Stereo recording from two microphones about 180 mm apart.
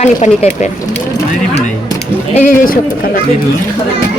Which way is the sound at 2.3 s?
45° left (ahead or behind).